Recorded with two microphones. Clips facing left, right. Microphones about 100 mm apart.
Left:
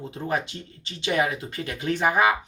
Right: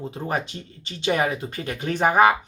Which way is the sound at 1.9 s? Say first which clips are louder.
Right 4 dB; 50° right (ahead or behind).